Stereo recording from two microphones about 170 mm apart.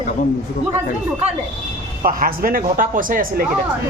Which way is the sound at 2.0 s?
55° right (ahead or behind).